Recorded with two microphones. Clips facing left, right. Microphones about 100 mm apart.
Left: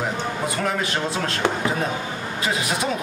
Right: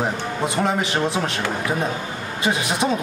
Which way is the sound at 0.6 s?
20° right (ahead or behind).